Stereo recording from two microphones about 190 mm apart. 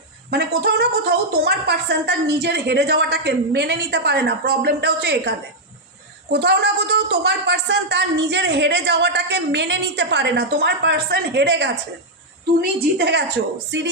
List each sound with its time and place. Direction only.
0.3 s a woman's voice: 60° right (ahead or behind)
6.3 s a woman's voice: 60° right (ahead or behind)
13.0 s a woman's voice: 60° right (ahead or behind)
13.7 s music: 70° right (ahead or behind)